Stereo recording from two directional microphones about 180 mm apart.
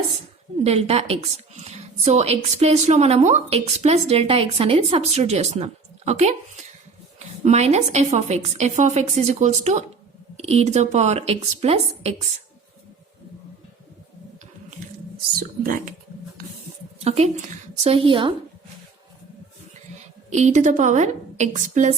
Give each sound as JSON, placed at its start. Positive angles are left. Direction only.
{"t": 0.6, "sound": "a woman's voice", "side_deg": -35}
{"t": 15.6, "sound": "speech", "side_deg": -50}
{"t": 17.0, "sound": "a woman's voice", "side_deg": -35}
{"t": 20.3, "sound": "a woman's voice", "side_deg": -40}